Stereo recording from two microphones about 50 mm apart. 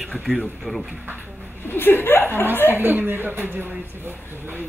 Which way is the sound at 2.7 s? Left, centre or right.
Right.